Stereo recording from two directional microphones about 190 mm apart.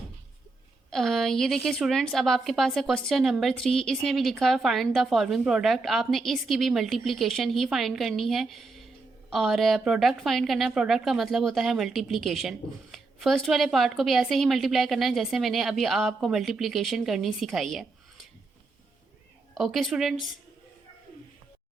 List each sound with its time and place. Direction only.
0.9 s a woman's voice: centre (ahead or behind)
19.5 s a woman's voice: centre (ahead or behind)